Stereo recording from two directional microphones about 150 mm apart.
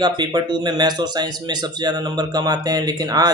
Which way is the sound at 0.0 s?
30° right (ahead or behind).